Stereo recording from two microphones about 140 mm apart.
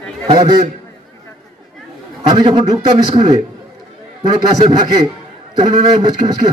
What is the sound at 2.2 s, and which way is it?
Speech, 35° right (ahead or behind).